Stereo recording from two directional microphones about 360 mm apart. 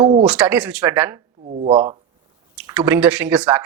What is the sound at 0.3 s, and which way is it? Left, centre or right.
Speech, centre.